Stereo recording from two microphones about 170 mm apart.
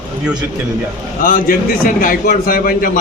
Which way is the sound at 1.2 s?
55° left (ahead or behind).